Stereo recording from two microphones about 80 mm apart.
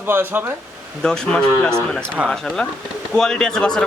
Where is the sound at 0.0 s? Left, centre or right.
Right.